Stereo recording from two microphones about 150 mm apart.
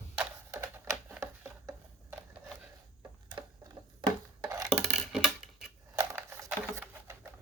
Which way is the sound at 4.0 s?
25° right (ahead or behind).